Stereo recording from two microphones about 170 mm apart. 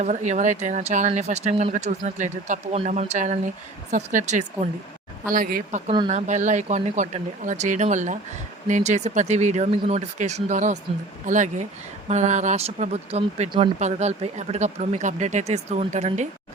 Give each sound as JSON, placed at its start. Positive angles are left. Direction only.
{"t": 0.0, "sound": "speech", "side_deg": -45}
{"t": 5.3, "sound": "speech", "side_deg": -55}
{"t": 5.9, "sound": "speech", "side_deg": -35}